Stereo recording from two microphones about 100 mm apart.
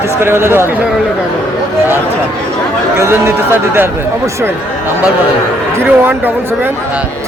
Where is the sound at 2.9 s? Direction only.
25° right (ahead or behind).